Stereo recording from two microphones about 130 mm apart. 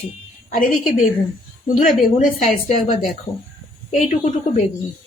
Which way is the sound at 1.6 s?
90° left.